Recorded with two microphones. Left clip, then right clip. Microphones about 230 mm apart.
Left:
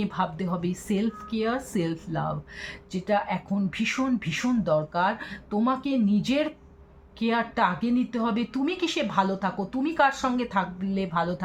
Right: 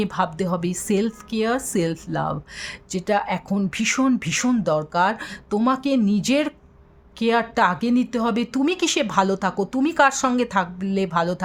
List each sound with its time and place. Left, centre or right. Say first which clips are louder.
0.0 s a woman's voice: right 6 dB; right